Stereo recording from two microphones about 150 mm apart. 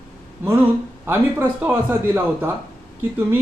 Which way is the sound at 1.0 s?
15° right (ahead or behind).